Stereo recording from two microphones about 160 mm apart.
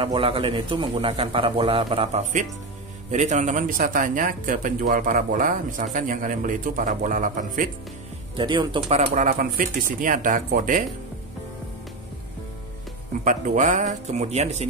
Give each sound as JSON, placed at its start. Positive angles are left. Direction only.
{"t": 0.0, "sound": "a man's voice", "side_deg": -35}
{"t": 3.1, "sound": "speech", "side_deg": -45}
{"t": 8.4, "sound": "speech", "side_deg": -30}
{"t": 13.2, "sound": "speech", "side_deg": -50}